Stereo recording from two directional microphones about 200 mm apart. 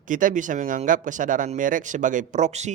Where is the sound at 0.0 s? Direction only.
40° right (ahead or behind).